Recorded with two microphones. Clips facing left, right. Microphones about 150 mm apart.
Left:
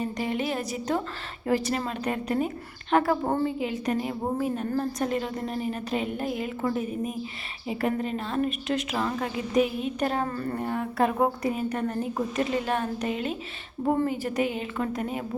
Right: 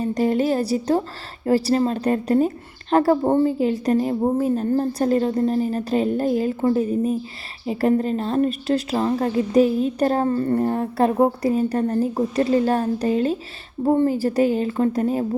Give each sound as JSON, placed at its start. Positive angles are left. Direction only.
{"t": 0.0, "sound": "a woman's voice", "side_deg": -40}
{"t": 3.2, "sound": "a woman's voice", "side_deg": -25}
{"t": 3.6, "sound": "a woman's voice", "side_deg": -35}